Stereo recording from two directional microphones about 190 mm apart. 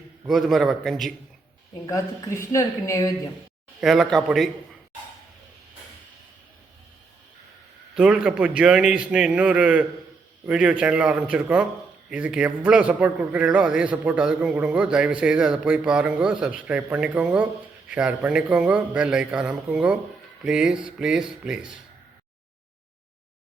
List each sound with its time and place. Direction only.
0.3 s a man's voice: centre (ahead or behind)
1.9 s a woman's voice: 15° left (ahead or behind)
3.8 s a man's voice: centre (ahead or behind)
7.9 s a man's voice: 5° right (ahead or behind)